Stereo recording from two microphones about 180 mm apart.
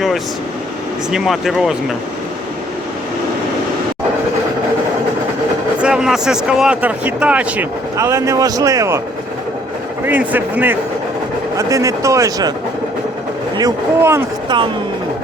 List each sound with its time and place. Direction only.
1.1 s speech: centre (ahead or behind)
5.8 s speech: 5° right (ahead or behind)
10.1 s speech: 10° right (ahead or behind)
13.6 s speech: 15° right (ahead or behind)